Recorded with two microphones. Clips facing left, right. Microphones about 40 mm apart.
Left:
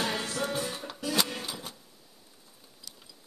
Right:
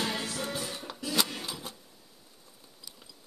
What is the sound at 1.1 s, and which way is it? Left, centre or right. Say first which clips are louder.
Music: even; centre.